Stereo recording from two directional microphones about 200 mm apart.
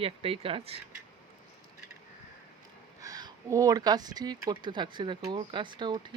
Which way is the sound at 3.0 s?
20° right (ahead or behind).